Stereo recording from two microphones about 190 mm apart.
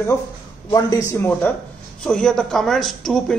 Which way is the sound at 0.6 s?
20° left (ahead or behind).